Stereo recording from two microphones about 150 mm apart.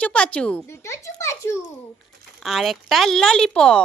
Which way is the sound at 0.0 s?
10° left (ahead or behind).